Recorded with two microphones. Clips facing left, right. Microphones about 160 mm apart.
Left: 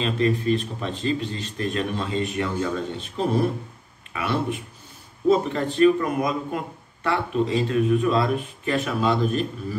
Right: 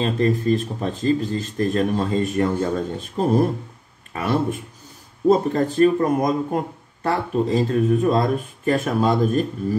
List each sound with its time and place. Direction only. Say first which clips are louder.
0.0 s speech: right 2 dB; 40° right (ahead or behind)